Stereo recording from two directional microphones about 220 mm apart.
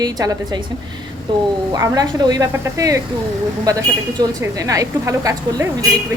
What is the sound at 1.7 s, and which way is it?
A woman's voice, 15° right (ahead or behind).